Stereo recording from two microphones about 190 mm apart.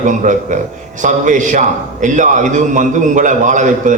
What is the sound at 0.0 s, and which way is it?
A man's voice, 40° right (ahead or behind).